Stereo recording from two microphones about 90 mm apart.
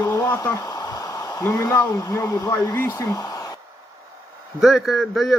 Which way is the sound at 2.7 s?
25° left (ahead or behind).